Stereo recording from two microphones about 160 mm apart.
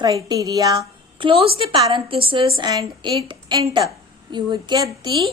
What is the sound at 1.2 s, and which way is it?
A woman's voice, 35° right (ahead or behind).